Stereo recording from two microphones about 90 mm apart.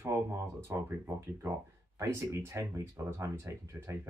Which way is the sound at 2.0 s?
30° right (ahead or behind).